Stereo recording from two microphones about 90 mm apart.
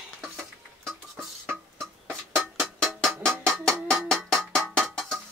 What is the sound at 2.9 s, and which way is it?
Cowbell, 5° left (ahead or behind).